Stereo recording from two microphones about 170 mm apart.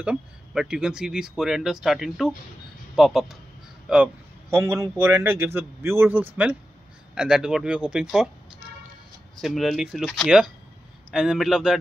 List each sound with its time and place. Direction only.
0.0 s speech: 5° right (ahead or behind)
3.9 s a man's voice: 10° right (ahead or behind)
9.4 s speech: centre (ahead or behind)